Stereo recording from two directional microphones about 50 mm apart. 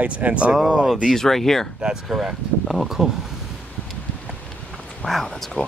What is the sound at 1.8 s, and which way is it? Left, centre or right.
Speech, centre.